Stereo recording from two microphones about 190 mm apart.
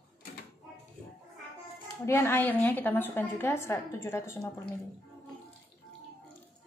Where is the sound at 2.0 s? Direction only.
10° left (ahead or behind).